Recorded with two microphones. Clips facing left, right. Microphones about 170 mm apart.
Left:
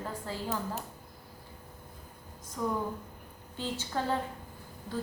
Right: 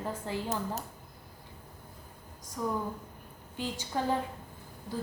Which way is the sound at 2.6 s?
10° right (ahead or behind).